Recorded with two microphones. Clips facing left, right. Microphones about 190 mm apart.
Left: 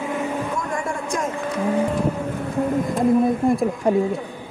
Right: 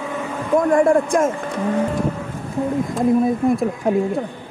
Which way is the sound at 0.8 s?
55° right (ahead or behind).